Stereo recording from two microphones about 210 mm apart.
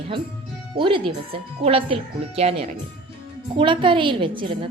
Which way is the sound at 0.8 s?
25° right (ahead or behind).